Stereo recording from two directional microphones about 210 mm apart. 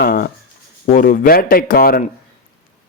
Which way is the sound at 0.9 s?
40° left (ahead or behind).